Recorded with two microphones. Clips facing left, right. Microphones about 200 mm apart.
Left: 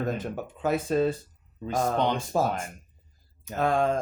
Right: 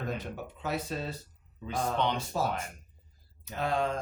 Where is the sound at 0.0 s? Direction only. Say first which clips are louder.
Left 6 dB; 45° left (ahead or behind).